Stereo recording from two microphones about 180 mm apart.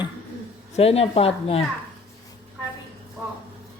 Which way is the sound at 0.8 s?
35° left (ahead or behind).